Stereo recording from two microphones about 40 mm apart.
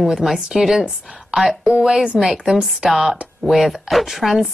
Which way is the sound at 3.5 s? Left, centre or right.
Centre.